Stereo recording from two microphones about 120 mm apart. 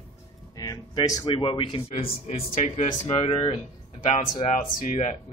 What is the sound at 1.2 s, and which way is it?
Speech, 50° left (ahead or behind).